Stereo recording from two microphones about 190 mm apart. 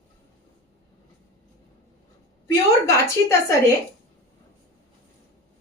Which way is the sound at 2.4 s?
15° left (ahead or behind).